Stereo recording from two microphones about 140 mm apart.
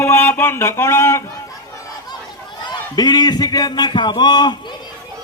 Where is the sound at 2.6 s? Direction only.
30° left (ahead or behind).